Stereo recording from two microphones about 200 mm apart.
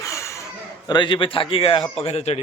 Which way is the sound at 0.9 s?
25° left (ahead or behind).